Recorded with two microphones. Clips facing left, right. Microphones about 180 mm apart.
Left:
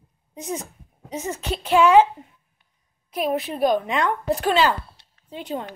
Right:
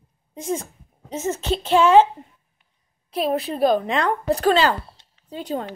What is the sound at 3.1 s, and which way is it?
A woman's voice, 35° right (ahead or behind).